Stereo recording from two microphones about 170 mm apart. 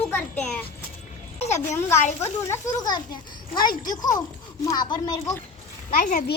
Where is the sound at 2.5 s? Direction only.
20° left (ahead or behind).